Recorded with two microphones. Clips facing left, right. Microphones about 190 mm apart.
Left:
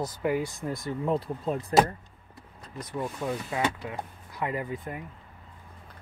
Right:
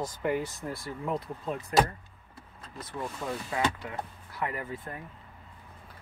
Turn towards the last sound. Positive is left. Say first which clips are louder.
# left 4 dB
turn(degrees=15)  # may be behind; listen again after turning